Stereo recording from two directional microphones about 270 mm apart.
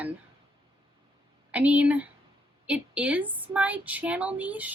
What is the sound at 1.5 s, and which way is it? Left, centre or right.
A woman's voice, centre.